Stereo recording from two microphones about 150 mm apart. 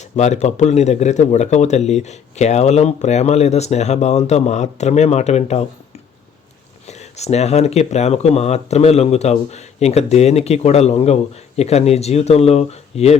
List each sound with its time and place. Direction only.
0.2 s speech: 50° left (ahead or behind)
6.8 s speech: 45° left (ahead or behind)